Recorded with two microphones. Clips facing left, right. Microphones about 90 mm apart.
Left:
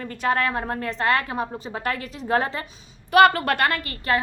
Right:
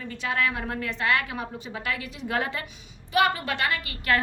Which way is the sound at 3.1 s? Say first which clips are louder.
Left 8 dB; 60° left (ahead or behind).